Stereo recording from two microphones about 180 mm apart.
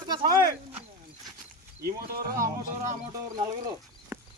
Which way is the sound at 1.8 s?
55° right (ahead or behind).